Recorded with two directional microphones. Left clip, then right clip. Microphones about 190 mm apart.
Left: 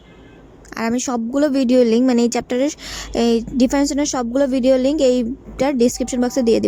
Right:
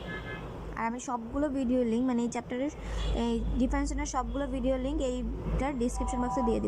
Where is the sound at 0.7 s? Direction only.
70° left (ahead or behind).